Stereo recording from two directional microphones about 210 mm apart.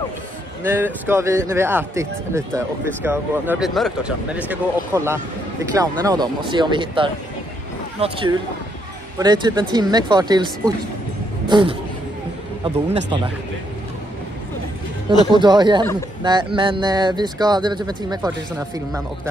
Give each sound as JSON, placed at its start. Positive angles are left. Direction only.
{"t": 0.7, "sound": "speech", "side_deg": -10}
{"t": 15.3, "sound": "speech", "side_deg": -20}